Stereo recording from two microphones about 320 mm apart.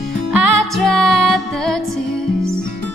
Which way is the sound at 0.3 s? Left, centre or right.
Left.